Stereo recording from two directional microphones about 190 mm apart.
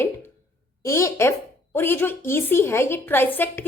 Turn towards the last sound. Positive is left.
turn(degrees=10)  # may be behind; listen again after turning